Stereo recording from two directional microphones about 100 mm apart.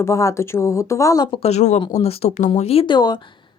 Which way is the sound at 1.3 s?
85° left.